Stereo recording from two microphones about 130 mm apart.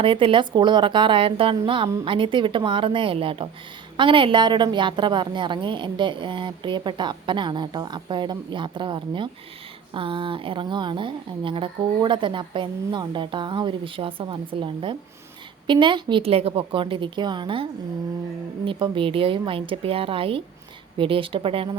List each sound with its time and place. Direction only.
0.0 s a woman's voice: 40° right (ahead or behind)